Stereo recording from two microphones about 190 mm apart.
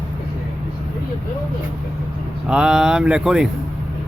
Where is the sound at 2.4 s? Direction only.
5° right (ahead or behind).